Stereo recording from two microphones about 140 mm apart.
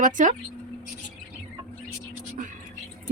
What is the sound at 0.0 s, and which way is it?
Speech, 65° right (ahead or behind).